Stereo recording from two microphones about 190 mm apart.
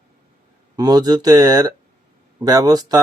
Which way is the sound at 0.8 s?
20° right (ahead or behind).